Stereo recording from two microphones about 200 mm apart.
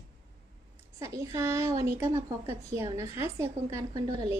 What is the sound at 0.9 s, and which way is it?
A woman's voice, 15° right (ahead or behind).